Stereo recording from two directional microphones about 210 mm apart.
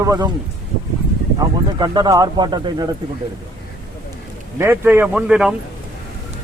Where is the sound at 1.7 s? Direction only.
20° right (ahead or behind).